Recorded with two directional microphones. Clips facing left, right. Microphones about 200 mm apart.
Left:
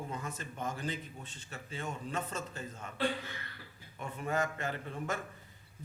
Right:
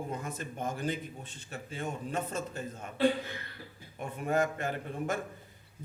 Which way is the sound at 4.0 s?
50° right (ahead or behind).